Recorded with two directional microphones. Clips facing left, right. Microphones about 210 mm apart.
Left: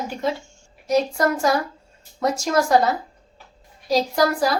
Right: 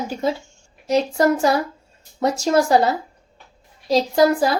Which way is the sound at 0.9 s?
25° right (ahead or behind).